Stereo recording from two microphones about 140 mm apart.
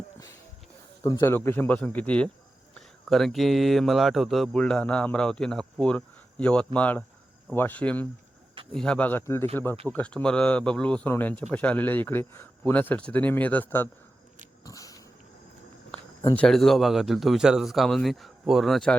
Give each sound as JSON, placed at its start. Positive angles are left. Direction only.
{"t": 1.2, "sound": "speech", "side_deg": 15}
{"t": 14.6, "sound": "a sound", "side_deg": 25}
{"t": 16.3, "sound": "speech", "side_deg": 5}